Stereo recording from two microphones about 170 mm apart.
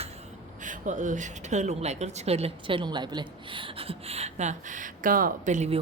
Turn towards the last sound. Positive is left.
turn(degrees=-45)  # may be behind; listen again after turning